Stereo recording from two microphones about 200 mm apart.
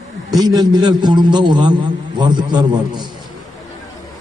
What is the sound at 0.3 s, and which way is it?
A man's voice, 20° right (ahead or behind).